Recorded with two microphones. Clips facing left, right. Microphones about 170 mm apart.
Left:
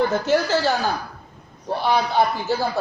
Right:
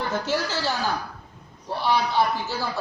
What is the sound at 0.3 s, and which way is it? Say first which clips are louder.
Speech: left 7 dB; 50° left (ahead or behind).